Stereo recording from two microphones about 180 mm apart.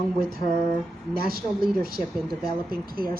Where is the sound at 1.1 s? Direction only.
55° right (ahead or behind).